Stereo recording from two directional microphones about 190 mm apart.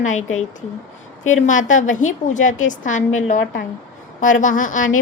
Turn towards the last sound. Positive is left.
turn(degrees=45)  # may be behind; listen again after turning